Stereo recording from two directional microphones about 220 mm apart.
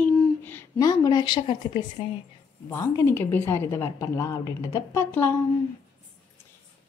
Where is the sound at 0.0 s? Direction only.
10° left (ahead or behind).